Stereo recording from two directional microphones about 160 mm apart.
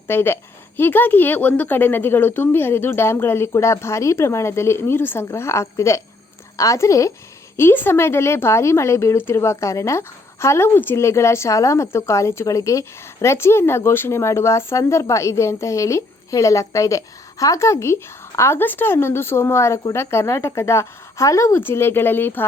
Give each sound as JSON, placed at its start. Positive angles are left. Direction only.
{"t": 0.1, "sound": "a woman's voice", "side_deg": 15}